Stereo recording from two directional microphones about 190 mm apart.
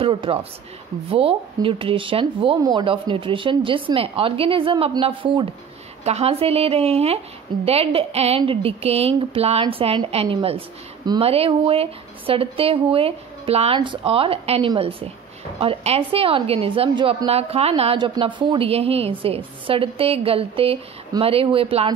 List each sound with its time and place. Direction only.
0.0 s a woman's voice: 30° right (ahead or behind)